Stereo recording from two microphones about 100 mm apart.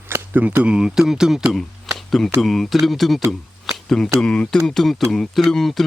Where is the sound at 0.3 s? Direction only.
15° right (ahead or behind).